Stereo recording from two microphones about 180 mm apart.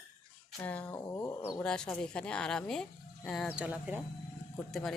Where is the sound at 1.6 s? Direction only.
5° left (ahead or behind).